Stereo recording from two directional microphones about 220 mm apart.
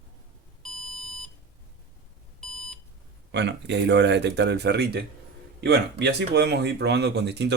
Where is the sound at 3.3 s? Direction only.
50° right (ahead or behind).